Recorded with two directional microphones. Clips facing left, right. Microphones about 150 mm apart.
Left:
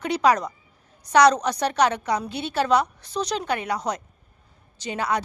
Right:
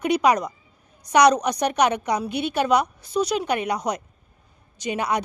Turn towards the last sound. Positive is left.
turn(degrees=-15)  # may be behind; listen again after turning